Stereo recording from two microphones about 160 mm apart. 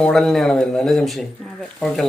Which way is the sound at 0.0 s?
5° left (ahead or behind).